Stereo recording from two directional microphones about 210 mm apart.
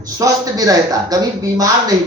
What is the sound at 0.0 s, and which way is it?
A man's voice, 15° right (ahead or behind).